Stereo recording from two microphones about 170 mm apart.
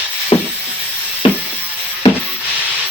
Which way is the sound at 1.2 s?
30° left (ahead or behind).